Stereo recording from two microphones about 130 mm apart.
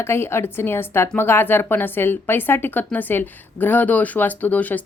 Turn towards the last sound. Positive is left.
turn(degrees=10)  # may be behind; listen again after turning